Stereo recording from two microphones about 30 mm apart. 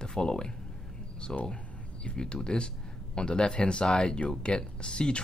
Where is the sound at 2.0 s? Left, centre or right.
Left.